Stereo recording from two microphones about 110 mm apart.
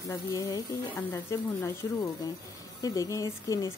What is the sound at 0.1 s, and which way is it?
Speech, 30° left (ahead or behind).